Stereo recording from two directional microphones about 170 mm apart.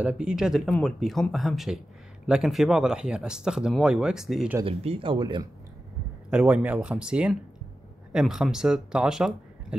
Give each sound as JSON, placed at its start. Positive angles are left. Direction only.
{"t": 0.0, "sound": "speech", "side_deg": -5}
{"t": 4.6, "sound": "speech", "side_deg": -35}
{"t": 6.3, "sound": "speech", "side_deg": -10}